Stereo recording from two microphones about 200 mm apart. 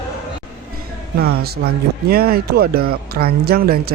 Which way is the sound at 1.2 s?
50° right (ahead or behind).